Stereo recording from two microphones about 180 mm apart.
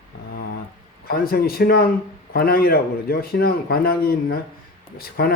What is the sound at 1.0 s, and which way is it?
Speech, 55° left (ahead or behind).